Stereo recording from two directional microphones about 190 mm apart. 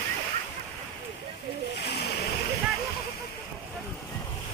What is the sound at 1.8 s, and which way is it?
Splash, 60° left (ahead or behind).